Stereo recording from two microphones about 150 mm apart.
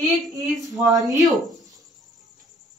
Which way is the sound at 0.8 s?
25° right (ahead or behind).